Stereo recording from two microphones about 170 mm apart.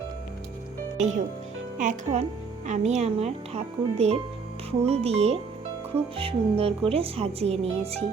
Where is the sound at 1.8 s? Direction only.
45° right (ahead or behind).